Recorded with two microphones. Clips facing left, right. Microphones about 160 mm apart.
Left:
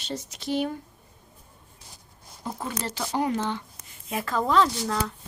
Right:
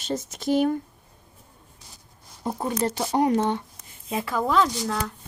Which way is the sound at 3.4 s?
50° right (ahead or behind).